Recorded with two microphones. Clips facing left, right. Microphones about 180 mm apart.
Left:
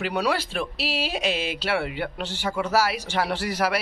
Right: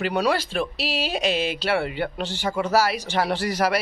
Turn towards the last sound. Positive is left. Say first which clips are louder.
# right 2 dB
turn(degrees=5)  # may be behind; listen again after turning